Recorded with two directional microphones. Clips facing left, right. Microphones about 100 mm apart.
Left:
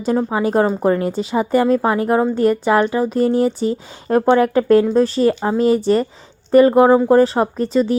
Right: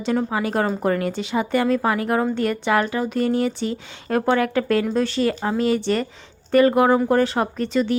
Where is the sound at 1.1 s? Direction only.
35° left (ahead or behind).